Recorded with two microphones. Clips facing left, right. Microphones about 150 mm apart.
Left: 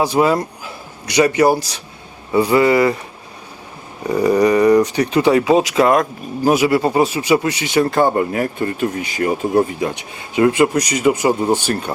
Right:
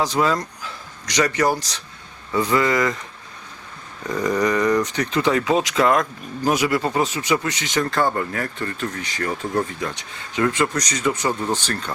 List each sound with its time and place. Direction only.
0.0 s speech: 15° left (ahead or behind)
4.0 s speech: 10° left (ahead or behind)